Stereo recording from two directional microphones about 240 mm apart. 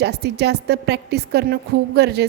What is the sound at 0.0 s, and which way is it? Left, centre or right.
A woman's voice, right.